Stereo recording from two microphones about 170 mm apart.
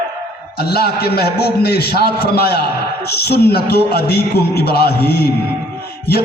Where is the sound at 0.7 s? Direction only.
70° left (ahead or behind).